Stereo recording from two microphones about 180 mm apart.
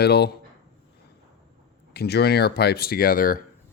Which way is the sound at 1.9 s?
65° left (ahead or behind).